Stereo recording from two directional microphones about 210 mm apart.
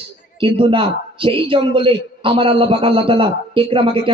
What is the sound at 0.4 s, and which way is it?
A man's voice, 25° right (ahead or behind).